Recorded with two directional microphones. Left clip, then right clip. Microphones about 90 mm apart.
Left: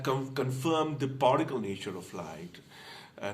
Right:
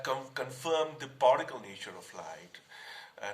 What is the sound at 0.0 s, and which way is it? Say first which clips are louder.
Speech: left 3 dB; 20° left (ahead or behind).